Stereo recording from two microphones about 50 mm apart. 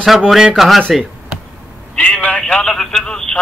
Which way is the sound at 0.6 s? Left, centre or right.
Centre.